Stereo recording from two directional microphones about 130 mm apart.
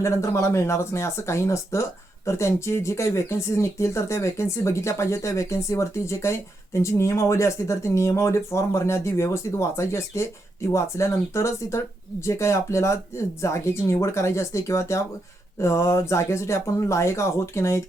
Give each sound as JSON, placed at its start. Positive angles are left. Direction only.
{"t": 0.0, "sound": "speech", "side_deg": 25}